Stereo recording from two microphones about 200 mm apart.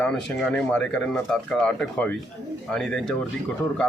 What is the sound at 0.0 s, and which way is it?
Speech, centre (ahead or behind).